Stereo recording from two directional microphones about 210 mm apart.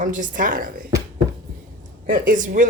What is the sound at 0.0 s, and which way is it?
Speech, 40° right (ahead or behind).